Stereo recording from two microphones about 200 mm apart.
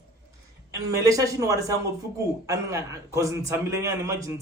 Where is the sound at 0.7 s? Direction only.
15° right (ahead or behind).